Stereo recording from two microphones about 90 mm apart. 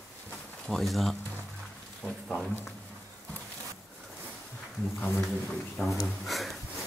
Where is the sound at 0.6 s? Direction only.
Centre (ahead or behind).